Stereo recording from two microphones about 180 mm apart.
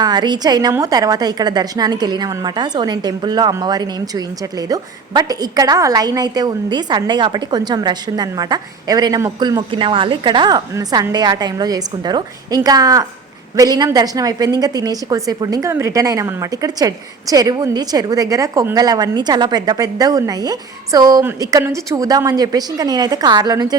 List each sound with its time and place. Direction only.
0.0 s a woman's voice: 25° right (ahead or behind)